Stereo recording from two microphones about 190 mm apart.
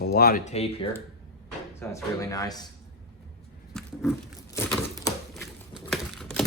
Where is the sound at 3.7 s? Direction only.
5° left (ahead or behind).